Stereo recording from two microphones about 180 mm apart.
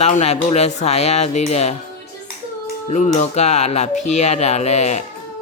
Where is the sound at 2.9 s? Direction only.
40° left (ahead or behind).